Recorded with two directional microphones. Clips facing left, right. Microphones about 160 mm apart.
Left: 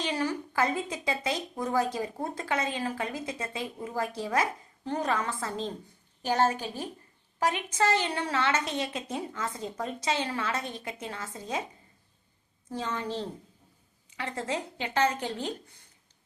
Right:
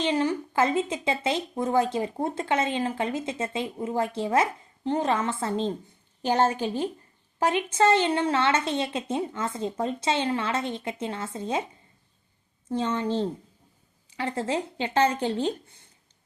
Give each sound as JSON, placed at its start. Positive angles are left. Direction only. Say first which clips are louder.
{"t": 0.0, "sound": "a woman's voice", "louder": "right 5 dB", "side_deg": -20}